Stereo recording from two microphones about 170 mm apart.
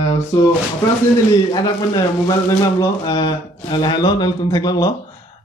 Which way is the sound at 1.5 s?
25° left (ahead or behind).